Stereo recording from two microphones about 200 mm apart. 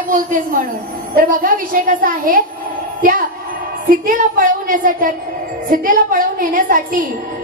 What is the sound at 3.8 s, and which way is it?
A woman's voice, 45° right (ahead or behind).